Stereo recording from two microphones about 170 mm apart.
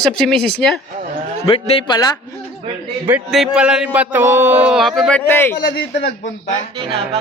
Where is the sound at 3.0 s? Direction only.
5° right (ahead or behind).